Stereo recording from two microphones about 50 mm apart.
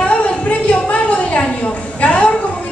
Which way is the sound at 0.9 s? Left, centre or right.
Left.